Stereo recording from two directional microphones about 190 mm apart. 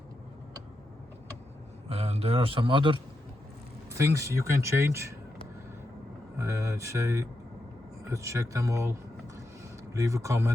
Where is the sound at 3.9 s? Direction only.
15° right (ahead or behind).